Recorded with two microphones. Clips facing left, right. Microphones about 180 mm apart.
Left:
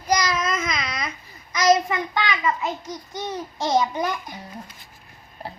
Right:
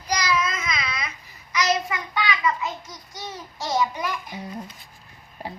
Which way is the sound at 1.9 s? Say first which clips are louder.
Left 2 dB; 45° left (ahead or behind).